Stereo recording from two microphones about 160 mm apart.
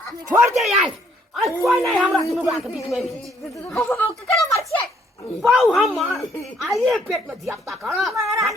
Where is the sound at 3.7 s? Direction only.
15° left (ahead or behind).